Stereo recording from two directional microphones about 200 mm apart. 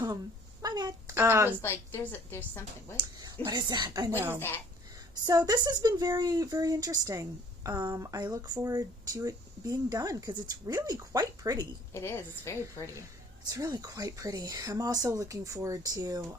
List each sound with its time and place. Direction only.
0.6 s a sound: 20° right (ahead or behind)
1.6 s a woman's voice: 10° left (ahead or behind)
3.0 s speech: 20° right (ahead or behind)
4.4 s a woman's voice: 10° left (ahead or behind)
5.2 s speech: 20° right (ahead or behind)
11.9 s a woman's voice: 15° left (ahead or behind)
12.8 s speech: 15° right (ahead or behind)